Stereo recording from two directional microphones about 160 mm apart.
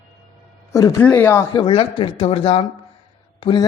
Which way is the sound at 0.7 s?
20° left (ahead or behind).